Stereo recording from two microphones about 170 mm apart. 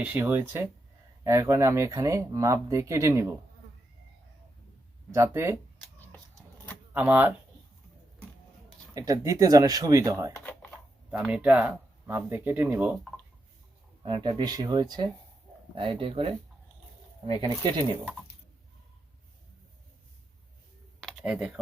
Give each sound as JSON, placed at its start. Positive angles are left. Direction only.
{"t": 0.0, "sound": "speech", "side_deg": -10}
{"t": 5.1, "sound": "speech", "side_deg": -15}
{"t": 6.1, "sound": "a sound", "side_deg": 10}
{"t": 6.9, "sound": "speech", "side_deg": -10}
{"t": 9.0, "sound": "speech", "side_deg": -20}
{"t": 10.3, "sound": "computer keyboard", "side_deg": 10}
{"t": 11.1, "sound": "speech", "side_deg": -5}
{"t": 14.0, "sound": "speech", "side_deg": -30}
{"t": 21.0, "sound": "computer keyboard", "side_deg": 0}